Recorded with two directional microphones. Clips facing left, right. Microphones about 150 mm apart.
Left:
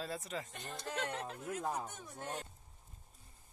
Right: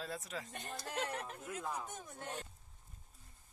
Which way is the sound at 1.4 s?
40° left (ahead or behind).